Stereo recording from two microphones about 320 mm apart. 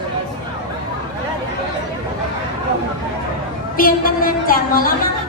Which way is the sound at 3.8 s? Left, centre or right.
Left.